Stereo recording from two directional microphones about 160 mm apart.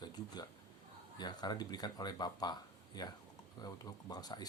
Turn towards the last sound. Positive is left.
turn(degrees=25)  # may be behind; listen again after turning